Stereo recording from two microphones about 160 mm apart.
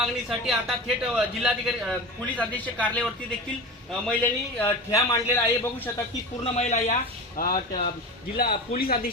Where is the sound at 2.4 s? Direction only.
10° left (ahead or behind).